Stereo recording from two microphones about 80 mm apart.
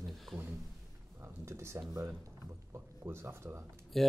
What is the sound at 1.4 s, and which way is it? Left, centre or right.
Speech, right.